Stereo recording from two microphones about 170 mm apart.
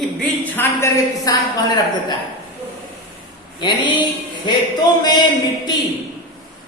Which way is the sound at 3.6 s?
25° left (ahead or behind).